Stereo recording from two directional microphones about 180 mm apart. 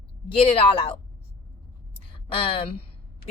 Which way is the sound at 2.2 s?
30° left (ahead or behind).